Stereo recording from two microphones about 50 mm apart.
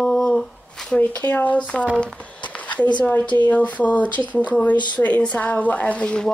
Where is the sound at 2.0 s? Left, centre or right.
Left.